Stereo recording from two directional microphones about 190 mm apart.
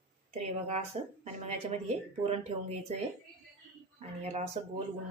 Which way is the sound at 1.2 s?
35° right (ahead or behind).